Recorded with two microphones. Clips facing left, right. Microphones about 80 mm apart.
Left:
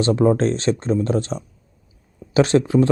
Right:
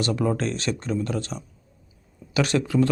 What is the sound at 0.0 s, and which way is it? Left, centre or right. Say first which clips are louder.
Speech: left 8 dB; left.